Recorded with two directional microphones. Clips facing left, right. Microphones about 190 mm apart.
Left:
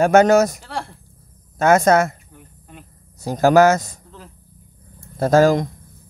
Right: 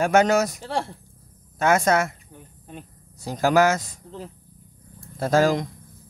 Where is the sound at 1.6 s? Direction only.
45° left (ahead or behind).